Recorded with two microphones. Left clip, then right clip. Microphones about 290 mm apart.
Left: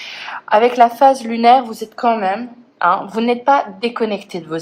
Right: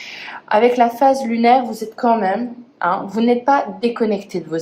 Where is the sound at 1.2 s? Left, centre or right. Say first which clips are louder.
Left 3 dB; centre.